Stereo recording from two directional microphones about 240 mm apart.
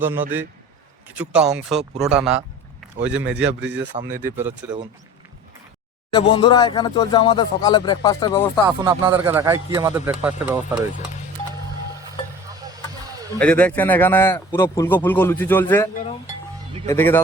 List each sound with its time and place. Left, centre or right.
0.0 s speech: centre
3.4 s speech: right
4.0 s speech: centre
6.1 s speech: left
8.6 s speech: centre
13.4 s speech: centre